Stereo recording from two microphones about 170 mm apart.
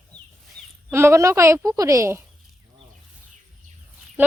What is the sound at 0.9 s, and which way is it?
A woman's voice, 15° right (ahead or behind).